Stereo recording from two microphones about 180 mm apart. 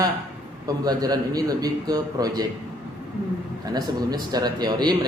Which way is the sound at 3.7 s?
20° right (ahead or behind).